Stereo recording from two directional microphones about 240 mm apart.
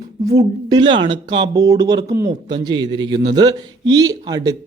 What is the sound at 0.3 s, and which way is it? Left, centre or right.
Speech, centre.